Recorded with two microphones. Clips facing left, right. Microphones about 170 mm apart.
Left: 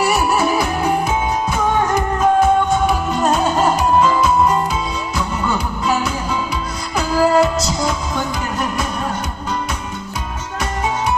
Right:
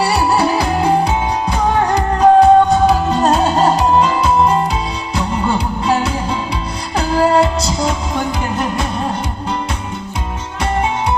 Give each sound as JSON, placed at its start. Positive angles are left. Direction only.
{"t": 0.0, "sound": "music", "side_deg": -30}